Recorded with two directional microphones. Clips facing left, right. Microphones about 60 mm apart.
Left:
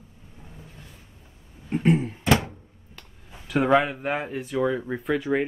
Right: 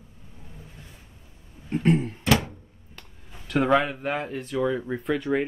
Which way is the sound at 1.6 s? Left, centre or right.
Centre.